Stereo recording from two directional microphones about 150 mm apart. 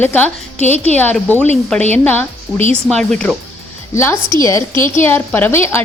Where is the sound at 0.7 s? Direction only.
45° right (ahead or behind).